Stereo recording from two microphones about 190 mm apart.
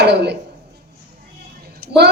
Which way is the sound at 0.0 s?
60° right (ahead or behind).